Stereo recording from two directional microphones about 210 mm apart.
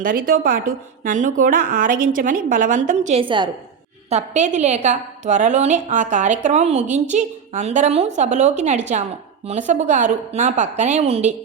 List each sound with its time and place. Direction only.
0.0 s a woman's voice: 40° right (ahead or behind); by 3.5 s 25° right (ahead or behind)
4.1 s a woman's voice: 35° right (ahead or behind)